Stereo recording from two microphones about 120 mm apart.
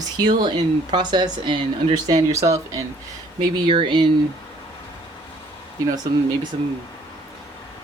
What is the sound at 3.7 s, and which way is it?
Speech, 45° right (ahead or behind).